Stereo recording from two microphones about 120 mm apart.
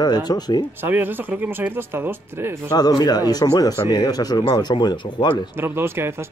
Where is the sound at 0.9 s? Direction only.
15° right (ahead or behind).